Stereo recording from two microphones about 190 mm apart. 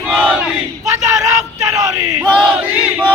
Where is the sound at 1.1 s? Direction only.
20° right (ahead or behind).